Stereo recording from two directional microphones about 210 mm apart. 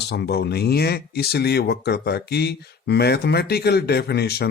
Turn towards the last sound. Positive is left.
turn(degrees=50)  # may be behind; listen again after turning